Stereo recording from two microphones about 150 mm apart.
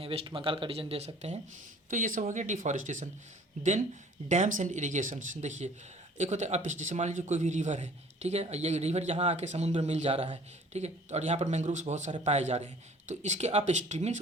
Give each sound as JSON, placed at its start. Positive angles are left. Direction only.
{"t": 0.0, "sound": "speech", "side_deg": -40}
{"t": 1.9, "sound": "speech", "side_deg": -60}